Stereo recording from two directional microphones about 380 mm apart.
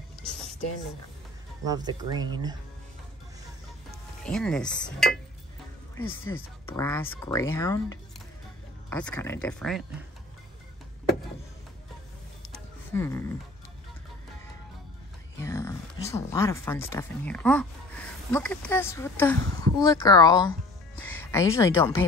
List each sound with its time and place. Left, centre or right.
1.7 s speech: centre
4.2 s speech: centre
6.0 s speech: left
6.8 s speech: centre
12.5 s music: centre
15.4 s speech: centre